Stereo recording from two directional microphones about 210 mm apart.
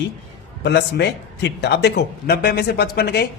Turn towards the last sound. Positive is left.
turn(degrees=50)  # may be behind; listen again after turning